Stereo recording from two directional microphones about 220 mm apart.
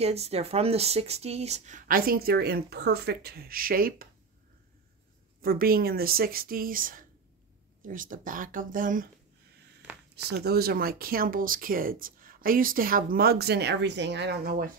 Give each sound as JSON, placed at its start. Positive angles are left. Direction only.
{"t": 0.0, "sound": "speech", "side_deg": -30}
{"t": 5.4, "sound": "speech", "side_deg": -40}
{"t": 10.1, "sound": "speech", "side_deg": -45}